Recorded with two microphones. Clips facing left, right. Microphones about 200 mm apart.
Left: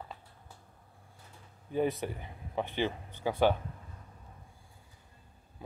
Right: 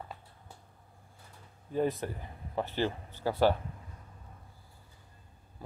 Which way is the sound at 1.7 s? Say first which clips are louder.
Even; centre (ahead or behind).